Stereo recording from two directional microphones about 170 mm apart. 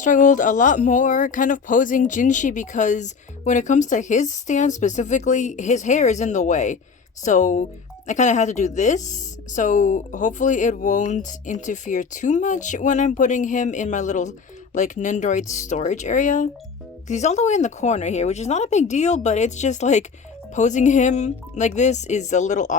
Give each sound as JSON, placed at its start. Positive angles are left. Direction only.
{"t": 0.0, "sound": "speech", "side_deg": 50}